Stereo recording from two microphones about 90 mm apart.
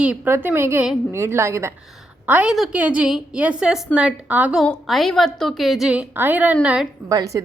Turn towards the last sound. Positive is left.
turn(degrees=-40)  # may be behind; listen again after turning